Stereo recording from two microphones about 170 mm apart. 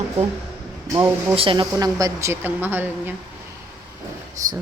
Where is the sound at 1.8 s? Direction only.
20° right (ahead or behind).